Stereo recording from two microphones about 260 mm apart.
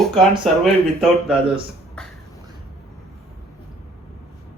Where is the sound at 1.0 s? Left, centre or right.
Centre.